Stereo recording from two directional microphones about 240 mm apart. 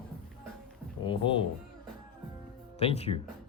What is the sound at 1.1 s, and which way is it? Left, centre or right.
Music, left.